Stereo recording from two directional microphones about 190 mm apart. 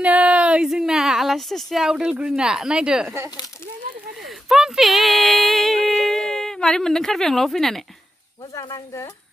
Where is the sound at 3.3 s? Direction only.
15° left (ahead or behind).